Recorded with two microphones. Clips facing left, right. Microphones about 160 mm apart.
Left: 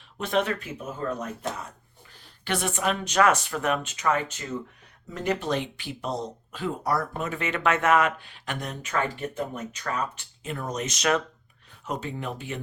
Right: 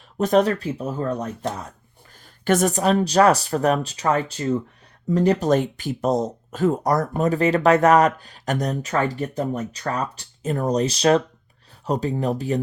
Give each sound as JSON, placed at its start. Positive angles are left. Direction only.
{"t": 0.2, "sound": "speech", "side_deg": -40}